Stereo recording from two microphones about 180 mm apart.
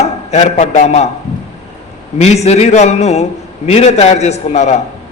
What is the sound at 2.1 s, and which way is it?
A man's voice, 35° left (ahead or behind).